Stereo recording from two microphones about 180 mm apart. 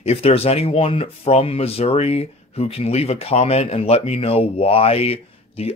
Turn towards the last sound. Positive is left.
turn(degrees=35)  # may be behind; listen again after turning